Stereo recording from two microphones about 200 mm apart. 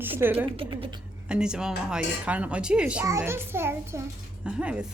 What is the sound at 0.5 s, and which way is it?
Speech, 25° right (ahead or behind).